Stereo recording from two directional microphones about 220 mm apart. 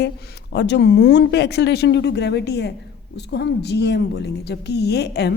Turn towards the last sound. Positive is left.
turn(degrees=50)  # may be behind; listen again after turning